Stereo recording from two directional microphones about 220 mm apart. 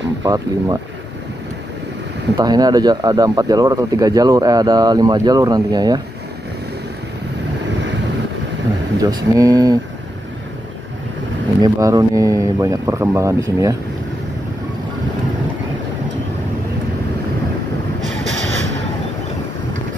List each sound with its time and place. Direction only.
0.2 s speech: 15° right (ahead or behind)
2.3 s speech: 20° right (ahead or behind)
8.9 s speech: 15° right (ahead or behind)
11.6 s speech: 15° right (ahead or behind)
18.3 s a sound: 55° right (ahead or behind)